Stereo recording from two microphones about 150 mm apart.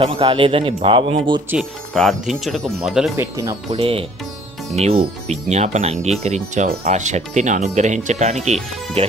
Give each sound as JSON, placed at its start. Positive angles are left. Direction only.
{"t": 0.0, "sound": "a man's voice", "side_deg": -35}
{"t": 1.9, "sound": "speech", "side_deg": 0}
{"t": 3.2, "sound": "speech", "side_deg": -20}
{"t": 3.7, "sound": "a man's voice", "side_deg": -40}